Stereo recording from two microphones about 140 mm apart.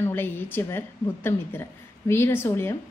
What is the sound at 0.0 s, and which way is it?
A woman's voice, 15° left (ahead or behind).